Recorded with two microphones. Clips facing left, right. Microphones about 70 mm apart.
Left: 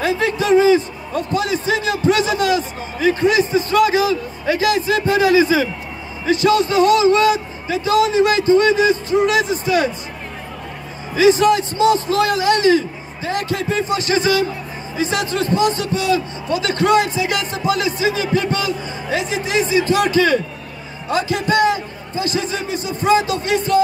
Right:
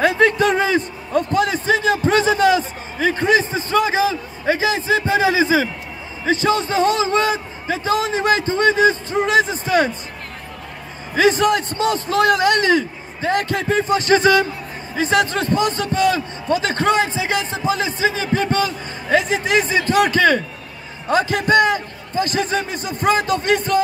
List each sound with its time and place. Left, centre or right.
0.0 s a man's voice: right
11.1 s a man's voice: right